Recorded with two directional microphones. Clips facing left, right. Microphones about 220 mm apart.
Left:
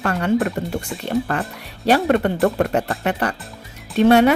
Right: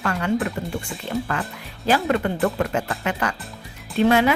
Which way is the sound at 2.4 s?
40° left (ahead or behind).